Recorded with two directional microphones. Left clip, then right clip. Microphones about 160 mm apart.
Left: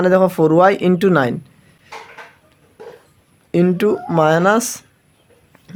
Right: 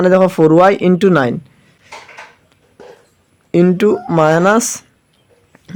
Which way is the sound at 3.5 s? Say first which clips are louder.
Right 4 dB; 20° right (ahead or behind).